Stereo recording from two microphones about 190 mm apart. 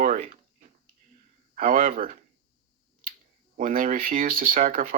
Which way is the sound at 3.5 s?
45° right (ahead or behind).